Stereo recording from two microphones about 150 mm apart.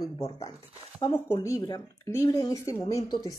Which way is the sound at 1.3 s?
20° left (ahead or behind).